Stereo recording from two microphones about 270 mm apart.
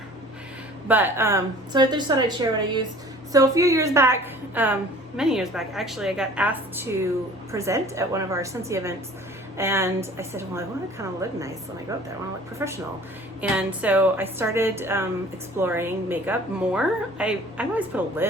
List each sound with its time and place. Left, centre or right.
0.9 s a woman's voice: centre
3.3 s a woman's voice: centre
12.5 s a woman's voice: centre